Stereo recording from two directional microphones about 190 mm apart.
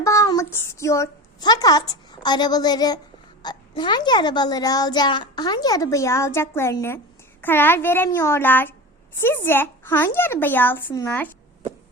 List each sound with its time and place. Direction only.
0.0 s a child's voice: 15° left (ahead or behind)